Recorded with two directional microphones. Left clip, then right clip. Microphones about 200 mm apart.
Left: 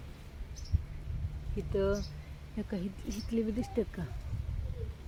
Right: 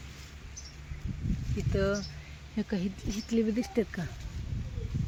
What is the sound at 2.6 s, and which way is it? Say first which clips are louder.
Speech: right 5 dB; 40° right (ahead or behind).